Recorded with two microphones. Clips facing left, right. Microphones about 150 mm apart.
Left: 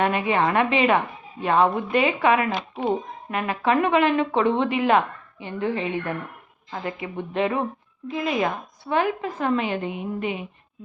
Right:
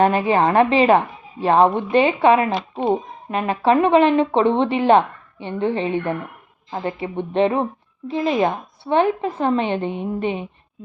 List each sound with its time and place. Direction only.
0.0 s a woman's voice: 35° right (ahead or behind)